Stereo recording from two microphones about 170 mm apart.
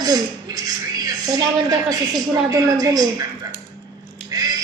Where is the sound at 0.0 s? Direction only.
20° right (ahead or behind).